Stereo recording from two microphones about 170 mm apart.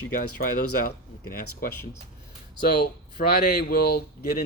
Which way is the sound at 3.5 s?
70° left (ahead or behind).